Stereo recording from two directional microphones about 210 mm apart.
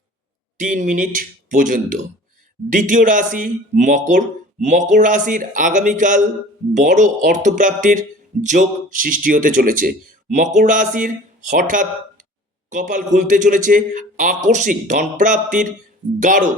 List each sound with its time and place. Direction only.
0.6 s speech: 40° right (ahead or behind)